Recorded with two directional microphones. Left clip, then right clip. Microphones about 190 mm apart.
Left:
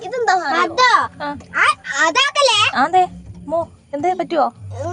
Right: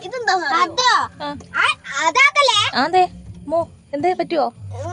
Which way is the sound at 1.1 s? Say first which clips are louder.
Left 2 dB; 10° right (ahead or behind).